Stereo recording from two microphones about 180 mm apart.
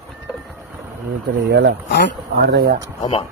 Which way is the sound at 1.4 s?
65° right (ahead or behind).